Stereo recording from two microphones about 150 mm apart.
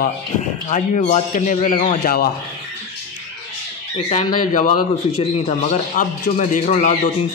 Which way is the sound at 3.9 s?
45° left (ahead or behind).